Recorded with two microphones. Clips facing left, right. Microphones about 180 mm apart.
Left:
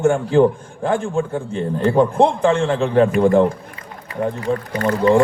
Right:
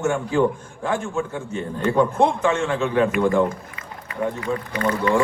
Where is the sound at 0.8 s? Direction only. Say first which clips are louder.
Left 5 dB; 35° left (ahead or behind).